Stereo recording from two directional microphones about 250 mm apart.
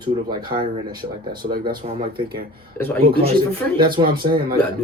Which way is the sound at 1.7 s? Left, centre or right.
Centre.